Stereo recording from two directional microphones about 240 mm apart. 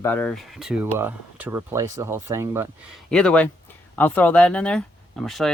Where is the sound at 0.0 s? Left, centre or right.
Centre.